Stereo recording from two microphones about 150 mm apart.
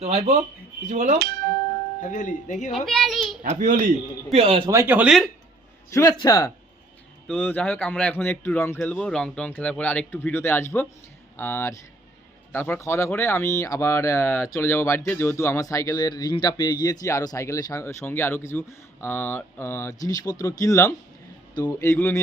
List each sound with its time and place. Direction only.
0.0 s speech: 50° right (ahead or behind)
2.0 s speech: 60° left (ahead or behind)
2.7 s a child's voice: centre (ahead or behind)
3.6 s a man's voice: 65° right (ahead or behind)
4.4 s speech: 35° right (ahead or behind)
4.7 s speech: 15° right (ahead or behind)
5.9 s speech: 25° left (ahead or behind)
7.3 s speech: 10° left (ahead or behind)